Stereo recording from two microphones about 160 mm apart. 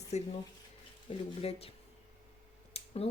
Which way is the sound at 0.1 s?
45° left (ahead or behind).